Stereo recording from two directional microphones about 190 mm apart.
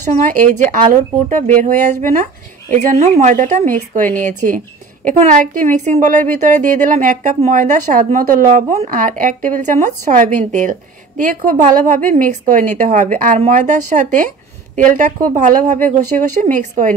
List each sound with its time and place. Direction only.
0.2 s speech: 40° right (ahead or behind)